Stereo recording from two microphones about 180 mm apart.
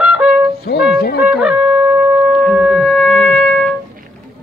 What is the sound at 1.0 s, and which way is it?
Speech, 60° left (ahead or behind).